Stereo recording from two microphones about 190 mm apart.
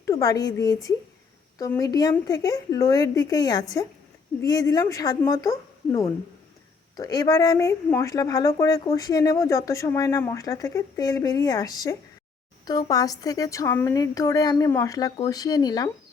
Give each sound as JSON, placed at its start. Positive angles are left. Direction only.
{"t": 0.0, "sound": "a woman's voice", "side_deg": 15}